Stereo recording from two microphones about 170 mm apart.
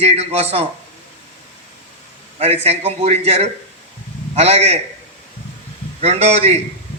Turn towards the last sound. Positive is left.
turn(degrees=-40)  # may be behind; listen again after turning